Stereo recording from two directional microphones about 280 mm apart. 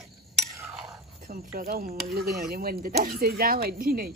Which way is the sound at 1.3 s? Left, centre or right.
Right.